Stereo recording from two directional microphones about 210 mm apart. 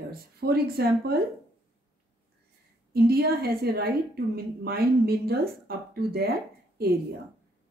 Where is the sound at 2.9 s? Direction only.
50° right (ahead or behind).